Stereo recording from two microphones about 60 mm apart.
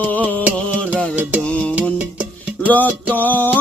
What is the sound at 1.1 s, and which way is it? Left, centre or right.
Music, right.